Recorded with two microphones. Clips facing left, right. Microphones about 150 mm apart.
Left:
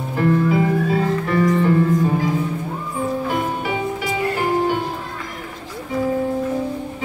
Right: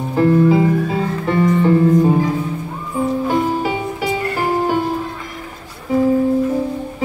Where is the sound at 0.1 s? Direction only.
30° right (ahead or behind).